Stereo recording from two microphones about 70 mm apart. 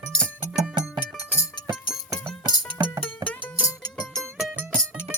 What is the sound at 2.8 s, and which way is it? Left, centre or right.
Music, right.